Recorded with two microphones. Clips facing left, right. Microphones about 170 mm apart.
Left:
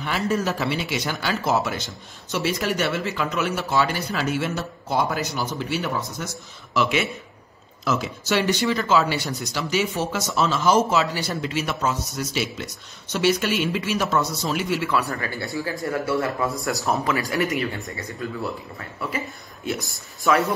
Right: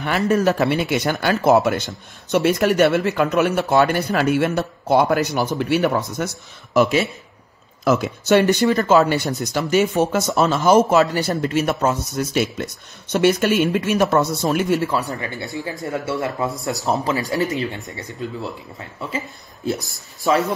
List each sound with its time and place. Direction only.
0.0 s speech: 55° right (ahead or behind); by 7.1 s 40° right (ahead or behind)
7.8 s speech: 55° right (ahead or behind)
14.9 s speech: 20° right (ahead or behind)